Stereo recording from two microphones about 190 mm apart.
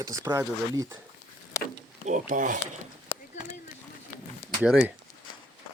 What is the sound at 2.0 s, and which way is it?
Speech, 40° right (ahead or behind).